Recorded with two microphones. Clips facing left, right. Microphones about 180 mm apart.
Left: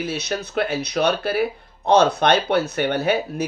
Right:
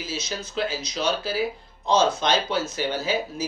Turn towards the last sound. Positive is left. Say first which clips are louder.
# left 5 dB
turn(degrees=60)  # may be behind; listen again after turning